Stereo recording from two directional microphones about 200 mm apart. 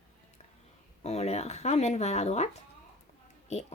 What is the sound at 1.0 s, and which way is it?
Speech, 30° left (ahead or behind).